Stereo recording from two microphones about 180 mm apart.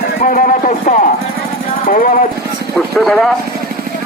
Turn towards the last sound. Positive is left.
turn(degrees=0)  # may be behind; listen again after turning